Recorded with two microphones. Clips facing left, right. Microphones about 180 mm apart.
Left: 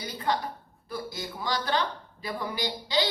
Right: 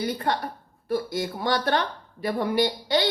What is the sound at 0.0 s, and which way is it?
Speech, 55° right (ahead or behind).